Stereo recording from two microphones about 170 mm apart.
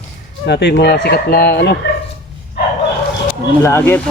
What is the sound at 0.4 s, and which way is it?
Speech, 80° left.